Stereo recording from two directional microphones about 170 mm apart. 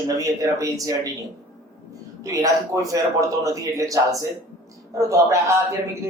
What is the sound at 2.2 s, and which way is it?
A man's voice, 20° right (ahead or behind).